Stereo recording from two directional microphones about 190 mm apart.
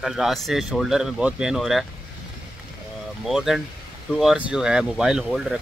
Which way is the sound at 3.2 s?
Centre (ahead or behind).